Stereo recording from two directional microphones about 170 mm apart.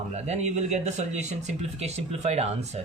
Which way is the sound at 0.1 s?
40° right (ahead or behind).